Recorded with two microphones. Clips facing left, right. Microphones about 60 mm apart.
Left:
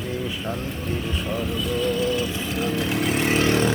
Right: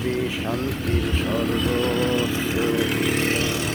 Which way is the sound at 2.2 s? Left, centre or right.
Right.